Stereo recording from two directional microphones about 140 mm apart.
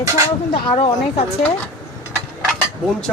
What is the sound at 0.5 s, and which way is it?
Speech, 45° left (ahead or behind).